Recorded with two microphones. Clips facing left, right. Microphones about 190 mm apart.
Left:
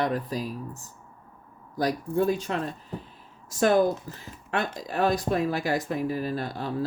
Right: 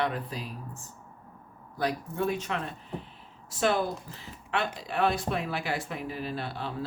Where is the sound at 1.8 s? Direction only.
35° left (ahead or behind).